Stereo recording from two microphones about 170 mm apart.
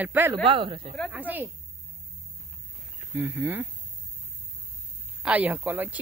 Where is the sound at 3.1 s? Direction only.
10° right (ahead or behind).